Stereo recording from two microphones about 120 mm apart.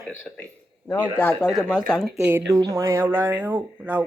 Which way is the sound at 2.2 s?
20° right (ahead or behind).